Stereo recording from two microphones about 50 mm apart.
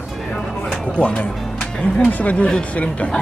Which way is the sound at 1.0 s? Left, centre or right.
Left.